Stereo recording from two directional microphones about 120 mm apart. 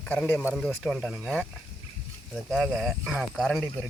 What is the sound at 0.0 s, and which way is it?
Speech, 10° left (ahead or behind).